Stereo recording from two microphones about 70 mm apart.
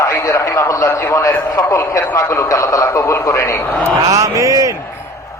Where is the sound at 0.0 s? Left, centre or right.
Left.